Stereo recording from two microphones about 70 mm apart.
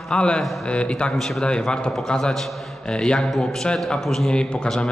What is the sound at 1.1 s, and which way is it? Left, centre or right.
A man's voice, centre.